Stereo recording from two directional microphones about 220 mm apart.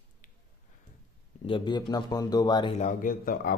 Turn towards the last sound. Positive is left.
turn(degrees=40)  # may be behind; listen again after turning